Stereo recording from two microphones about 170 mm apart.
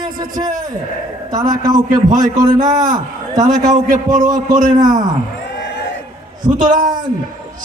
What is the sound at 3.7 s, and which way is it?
Speech, 45° right (ahead or behind).